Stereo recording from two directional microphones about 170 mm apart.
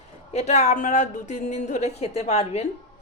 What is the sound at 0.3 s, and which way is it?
A woman's voice, 40° left (ahead or behind).